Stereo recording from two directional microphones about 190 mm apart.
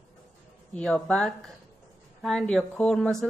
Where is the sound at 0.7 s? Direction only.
5° left (ahead or behind).